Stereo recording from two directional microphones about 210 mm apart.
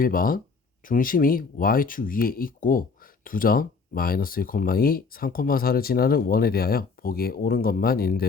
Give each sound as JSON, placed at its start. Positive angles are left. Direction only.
{"t": 0.0, "sound": "speech", "side_deg": 40}